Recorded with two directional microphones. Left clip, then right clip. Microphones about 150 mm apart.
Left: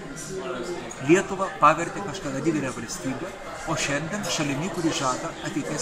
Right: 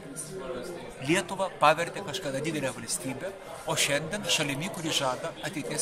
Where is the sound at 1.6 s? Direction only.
25° right (ahead or behind).